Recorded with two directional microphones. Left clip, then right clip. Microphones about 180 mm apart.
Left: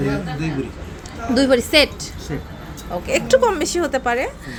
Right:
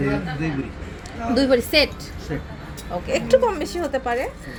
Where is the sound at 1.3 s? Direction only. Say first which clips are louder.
Left 3 dB; 10° left (ahead or behind).